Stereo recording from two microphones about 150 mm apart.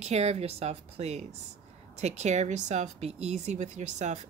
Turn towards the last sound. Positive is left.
turn(degrees=-50)  # may be behind; listen again after turning